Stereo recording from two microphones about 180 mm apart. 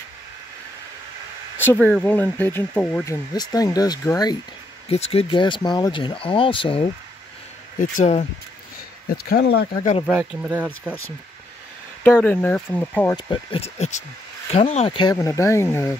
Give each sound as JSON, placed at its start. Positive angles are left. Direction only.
{"t": 1.6, "sound": "speech", "side_deg": 10}
{"t": 3.3, "sound": "speech", "side_deg": 20}
{"t": 4.8, "sound": "speech", "side_deg": 35}
{"t": 7.8, "sound": "speech", "side_deg": 45}
{"t": 9.1, "sound": "speech", "side_deg": 60}
{"t": 10.0, "sound": "speech", "side_deg": -5}
{"t": 12.0, "sound": "speech", "side_deg": 10}
{"t": 13.1, "sound": "speech", "side_deg": 30}
{"t": 15.1, "sound": "speech", "side_deg": 15}